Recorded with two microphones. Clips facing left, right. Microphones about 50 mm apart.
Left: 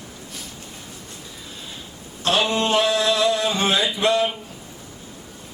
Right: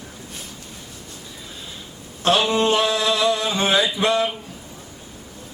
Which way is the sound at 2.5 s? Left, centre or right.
Centre.